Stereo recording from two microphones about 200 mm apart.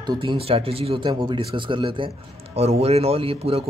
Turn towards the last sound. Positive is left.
turn(degrees=-30)  # may be behind; listen again after turning